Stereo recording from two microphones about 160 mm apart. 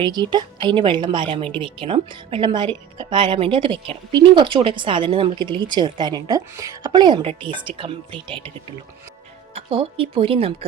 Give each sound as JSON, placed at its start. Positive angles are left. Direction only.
{"t": 0.0, "sound": "a woman's voice", "side_deg": -25}
{"t": 9.6, "sound": "a woman's voice", "side_deg": -35}